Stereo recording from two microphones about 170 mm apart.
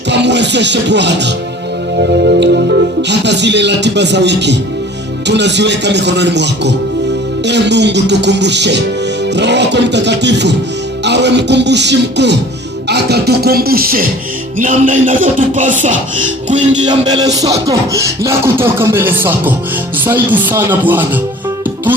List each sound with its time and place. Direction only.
0.1 s speech: 90° right
12.9 s music: 75° right (ahead or behind); by 14.1 s 60° right (ahead or behind)
14.6 s music: 50° right (ahead or behind)
17.1 s beatboxing: 20° right (ahead or behind)